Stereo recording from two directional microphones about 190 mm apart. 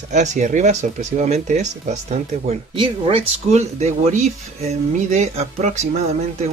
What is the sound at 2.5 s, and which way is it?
Speech, 30° right (ahead or behind).